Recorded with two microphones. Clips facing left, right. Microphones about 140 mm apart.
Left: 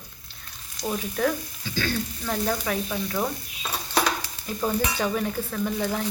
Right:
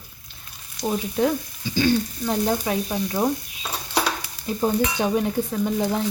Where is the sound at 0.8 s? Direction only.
20° right (ahead or behind).